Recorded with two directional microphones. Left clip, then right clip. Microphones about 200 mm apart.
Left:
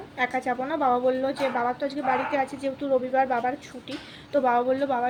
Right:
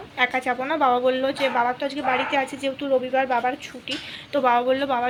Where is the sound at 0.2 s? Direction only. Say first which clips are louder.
Right 4 dB; centre (ahead or behind).